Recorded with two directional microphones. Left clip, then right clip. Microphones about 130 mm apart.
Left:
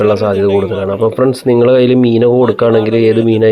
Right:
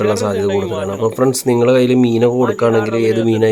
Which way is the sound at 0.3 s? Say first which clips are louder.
Left 5 dB; 20° left (ahead or behind).